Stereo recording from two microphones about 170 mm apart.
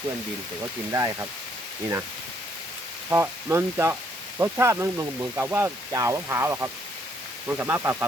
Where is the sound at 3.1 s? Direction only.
15° right (ahead or behind).